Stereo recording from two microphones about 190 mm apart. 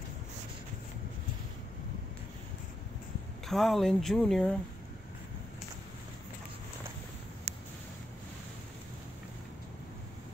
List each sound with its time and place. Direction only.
3.4 s speech: centre (ahead or behind)